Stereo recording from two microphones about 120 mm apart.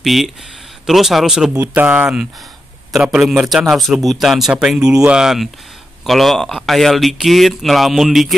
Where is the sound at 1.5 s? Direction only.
15° right (ahead or behind).